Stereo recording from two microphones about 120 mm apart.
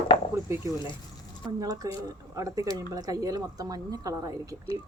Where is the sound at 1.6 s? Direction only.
30° right (ahead or behind).